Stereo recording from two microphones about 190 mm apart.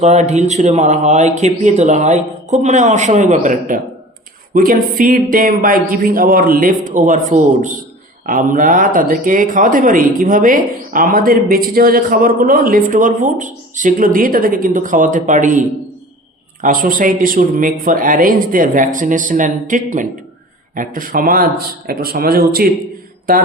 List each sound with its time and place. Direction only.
0.0 s speech: 35° right (ahead or behind)